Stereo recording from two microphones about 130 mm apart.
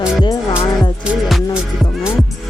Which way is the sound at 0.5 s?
25° left (ahead or behind).